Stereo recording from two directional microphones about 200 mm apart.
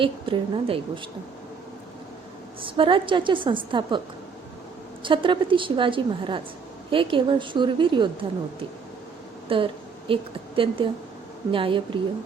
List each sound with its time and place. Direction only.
0.0 s a woman's voice: 25° right (ahead or behind)
2.6 s a woman's voice: 25° right (ahead or behind)
5.0 s a woman's voice: 25° right (ahead or behind)
9.5 s a woman's voice: 25° right (ahead or behind)